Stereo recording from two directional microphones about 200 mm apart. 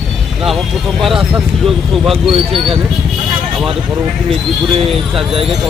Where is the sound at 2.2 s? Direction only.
30° right (ahead or behind).